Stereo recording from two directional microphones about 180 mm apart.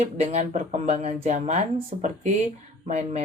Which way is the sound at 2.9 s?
40° right (ahead or behind).